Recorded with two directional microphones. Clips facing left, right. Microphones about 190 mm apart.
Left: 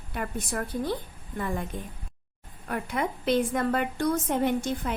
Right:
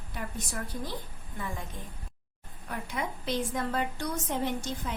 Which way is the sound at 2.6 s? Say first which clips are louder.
Left 6 dB; 60° left (ahead or behind).